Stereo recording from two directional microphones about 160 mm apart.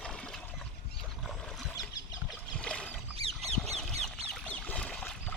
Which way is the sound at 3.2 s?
40° right (ahead or behind).